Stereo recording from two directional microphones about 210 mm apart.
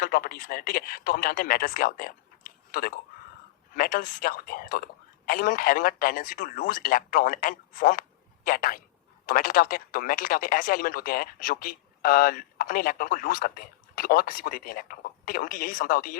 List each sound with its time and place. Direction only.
0.0 s a man's voice: 45° left (ahead or behind)